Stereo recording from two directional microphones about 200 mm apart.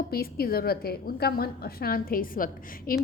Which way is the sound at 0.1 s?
50° left (ahead or behind).